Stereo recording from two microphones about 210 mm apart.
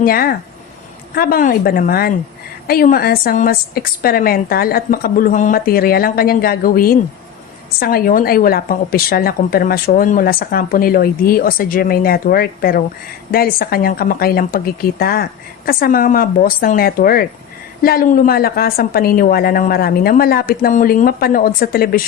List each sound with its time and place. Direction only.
0.0 s speech: 45° left (ahead or behind)